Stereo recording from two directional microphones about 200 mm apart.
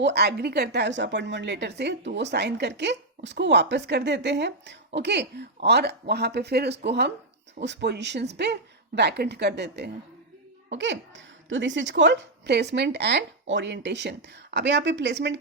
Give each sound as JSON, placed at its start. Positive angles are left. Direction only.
{"t": 0.0, "sound": "a woman's voice", "side_deg": -55}